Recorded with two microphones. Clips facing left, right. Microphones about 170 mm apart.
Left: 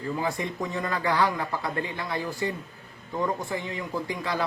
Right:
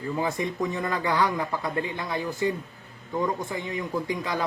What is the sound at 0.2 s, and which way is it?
Speech, 20° right (ahead or behind).